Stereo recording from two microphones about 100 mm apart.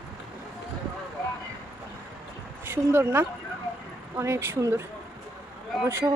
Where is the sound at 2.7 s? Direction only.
25° right (ahead or behind).